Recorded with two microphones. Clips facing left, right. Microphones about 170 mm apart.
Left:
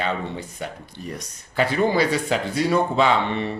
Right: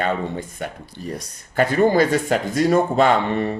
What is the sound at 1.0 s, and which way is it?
Speech, 40° right (ahead or behind).